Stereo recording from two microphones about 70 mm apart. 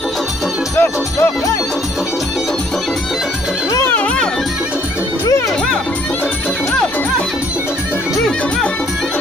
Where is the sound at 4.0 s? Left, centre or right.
Centre.